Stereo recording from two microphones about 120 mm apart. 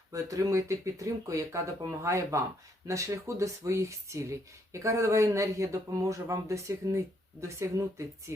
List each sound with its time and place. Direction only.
0.1 s speech: 25° right (ahead or behind)